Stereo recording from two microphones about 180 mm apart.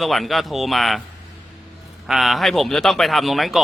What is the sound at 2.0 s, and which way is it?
Speech, centre (ahead or behind).